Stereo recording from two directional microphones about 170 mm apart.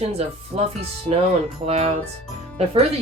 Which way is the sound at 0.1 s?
40° right (ahead or behind).